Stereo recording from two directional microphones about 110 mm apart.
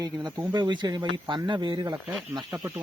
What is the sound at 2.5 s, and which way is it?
Speech, 25° right (ahead or behind).